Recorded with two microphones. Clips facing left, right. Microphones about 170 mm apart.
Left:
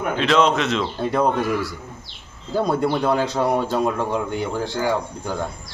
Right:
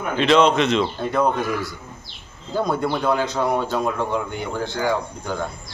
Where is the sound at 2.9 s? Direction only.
10° left (ahead or behind).